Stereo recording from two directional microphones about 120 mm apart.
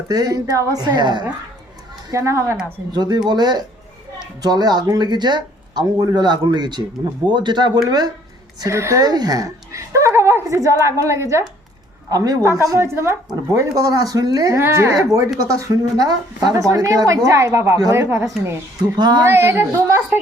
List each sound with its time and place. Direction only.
0.1 s speech: 35° right (ahead or behind)
2.0 s a woman's voice: 25° right (ahead or behind)
2.9 s a woman's voice: 35° right (ahead or behind); by 18.3 s 20° right (ahead or behind)
18.9 s speech: 35° right (ahead or behind)
19.3 s a woman's voice: 20° right (ahead or behind)